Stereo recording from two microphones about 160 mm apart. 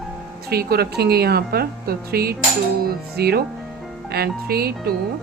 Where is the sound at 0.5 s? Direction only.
75° right (ahead or behind).